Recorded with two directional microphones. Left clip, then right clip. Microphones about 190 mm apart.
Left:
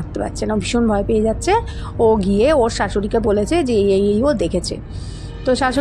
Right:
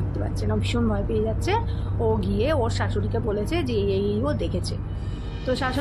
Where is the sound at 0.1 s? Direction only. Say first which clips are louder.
Left 9 dB; 35° left (ahead or behind).